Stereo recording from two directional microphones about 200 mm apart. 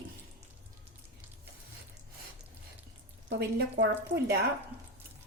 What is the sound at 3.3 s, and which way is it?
Speech, 60° right (ahead or behind).